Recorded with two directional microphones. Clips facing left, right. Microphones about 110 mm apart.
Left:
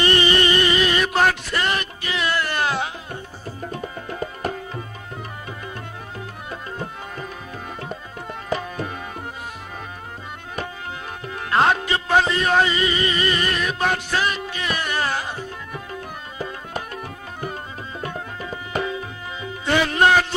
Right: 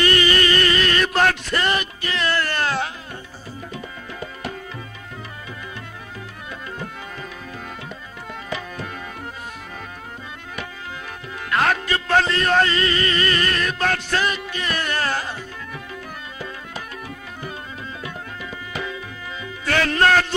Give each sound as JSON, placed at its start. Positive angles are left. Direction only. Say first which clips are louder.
{"t": 0.0, "sound": "a sound", "louder": "even", "side_deg": 25}
{"t": 3.8, "sound": "music", "louder": "left 4 dB", "side_deg": 40}
{"t": 11.3, "sound": "music", "louder": "left 2 dB", "side_deg": 25}
{"t": 16.7, "sound": "music", "louder": "left 3 dB", "side_deg": 45}
{"t": 18.0, "sound": "tabla", "louder": "left 3 dB", "side_deg": 40}
{"t": 19.4, "sound": "speech", "louder": "left 1 dB", "side_deg": 20}